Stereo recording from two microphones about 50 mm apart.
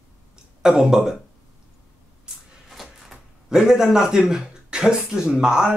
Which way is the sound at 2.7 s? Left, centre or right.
Centre.